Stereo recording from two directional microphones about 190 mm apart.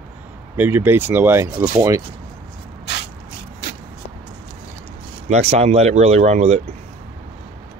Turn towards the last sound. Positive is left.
turn(degrees=-35)  # may be behind; listen again after turning